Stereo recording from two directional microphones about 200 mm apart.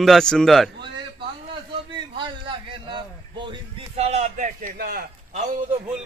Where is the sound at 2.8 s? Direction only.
25° right (ahead or behind); by 5.0 s 50° right (ahead or behind).